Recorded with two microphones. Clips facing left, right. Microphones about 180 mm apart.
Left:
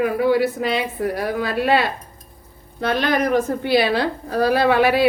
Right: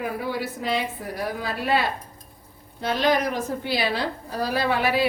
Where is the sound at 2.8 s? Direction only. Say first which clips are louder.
Left 3 dB; 60° left (ahead or behind).